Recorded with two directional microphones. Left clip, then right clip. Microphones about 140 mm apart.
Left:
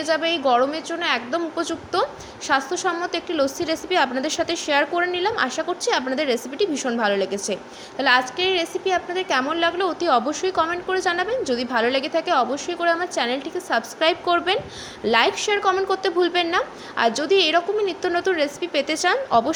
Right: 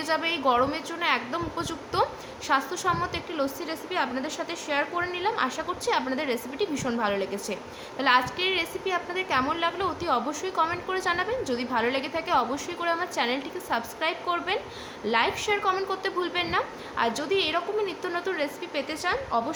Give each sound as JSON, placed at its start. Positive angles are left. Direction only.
{"t": 0.0, "sound": "a woman's voice", "side_deg": 30}